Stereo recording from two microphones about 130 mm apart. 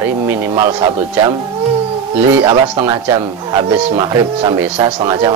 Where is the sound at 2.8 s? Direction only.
25° right (ahead or behind).